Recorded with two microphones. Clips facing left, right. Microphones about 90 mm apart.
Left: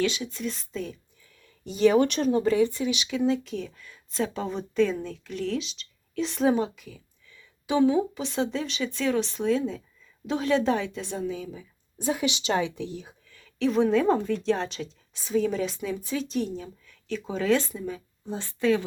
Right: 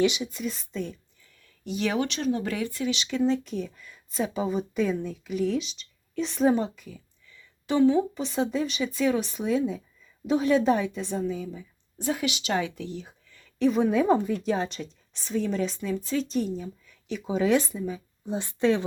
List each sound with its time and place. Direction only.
0.0 s a woman's voice: 15° right (ahead or behind)
1.6 s speech: 35° left (ahead or behind)
2.5 s speech: 25° left (ahead or behind)
3.1 s a woman's voice: 5° left (ahead or behind)
7.7 s speech: 10° left (ahead or behind)
8.2 s a woman's voice: centre (ahead or behind)
11.9 s speech: 20° left (ahead or behind)
13.3 s a woman's voice: centre (ahead or behind); by 18.9 s 25° right (ahead or behind)